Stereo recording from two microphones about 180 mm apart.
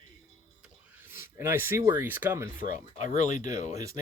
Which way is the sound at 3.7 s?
20° right (ahead or behind).